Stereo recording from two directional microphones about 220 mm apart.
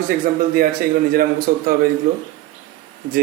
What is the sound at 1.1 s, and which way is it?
Speech, 40° right (ahead or behind).